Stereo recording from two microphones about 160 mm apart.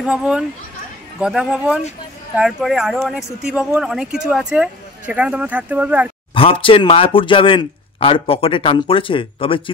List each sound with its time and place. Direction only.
0.0 s speech: 5° right (ahead or behind)
6.3 s speech: 35° left (ahead or behind)